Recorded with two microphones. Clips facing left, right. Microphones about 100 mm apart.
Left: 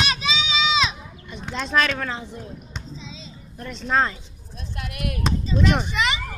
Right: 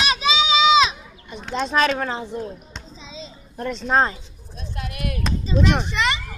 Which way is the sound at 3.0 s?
30° right (ahead or behind).